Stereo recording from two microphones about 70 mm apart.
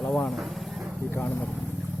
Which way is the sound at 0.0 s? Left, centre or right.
Centre.